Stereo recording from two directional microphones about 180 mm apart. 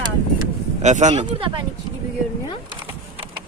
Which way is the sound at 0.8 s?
40° right (ahead or behind).